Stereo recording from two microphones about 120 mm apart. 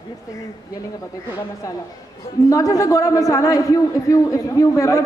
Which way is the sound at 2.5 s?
30° left (ahead or behind).